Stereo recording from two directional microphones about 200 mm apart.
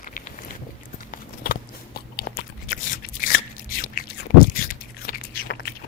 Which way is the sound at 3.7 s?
45° left (ahead or behind).